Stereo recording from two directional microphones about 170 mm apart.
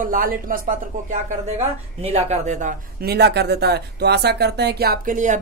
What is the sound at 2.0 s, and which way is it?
Speech, 40° right (ahead or behind).